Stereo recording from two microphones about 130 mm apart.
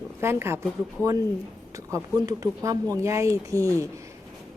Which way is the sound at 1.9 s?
25° right (ahead or behind).